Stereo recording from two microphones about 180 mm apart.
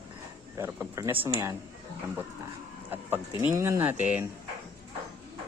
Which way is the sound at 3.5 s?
15° right (ahead or behind).